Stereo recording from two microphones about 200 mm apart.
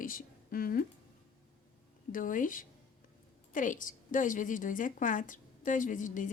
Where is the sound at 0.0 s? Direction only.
45° left (ahead or behind).